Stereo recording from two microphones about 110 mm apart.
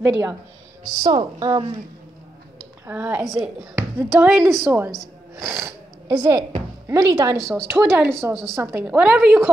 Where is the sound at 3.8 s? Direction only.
20° right (ahead or behind).